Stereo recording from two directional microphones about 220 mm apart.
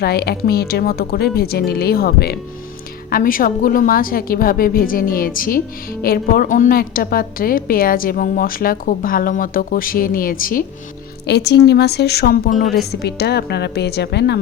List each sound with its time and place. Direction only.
0.0 s a woman's voice: 45° left (ahead or behind)